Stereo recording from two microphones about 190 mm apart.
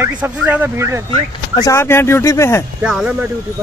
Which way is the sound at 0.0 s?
10° right (ahead or behind).